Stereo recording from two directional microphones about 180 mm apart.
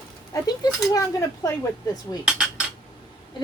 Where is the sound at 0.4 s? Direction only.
20° left (ahead or behind).